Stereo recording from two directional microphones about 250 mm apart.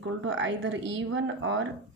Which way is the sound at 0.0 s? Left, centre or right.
Right.